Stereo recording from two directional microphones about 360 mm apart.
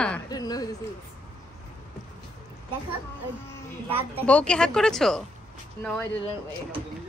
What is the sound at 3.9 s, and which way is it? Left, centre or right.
A woman's voice, centre.